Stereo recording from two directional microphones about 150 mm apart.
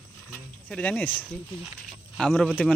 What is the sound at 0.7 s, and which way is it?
Speech, 10° left (ahead or behind).